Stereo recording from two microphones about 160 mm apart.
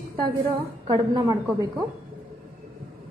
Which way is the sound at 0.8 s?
20° right (ahead or behind).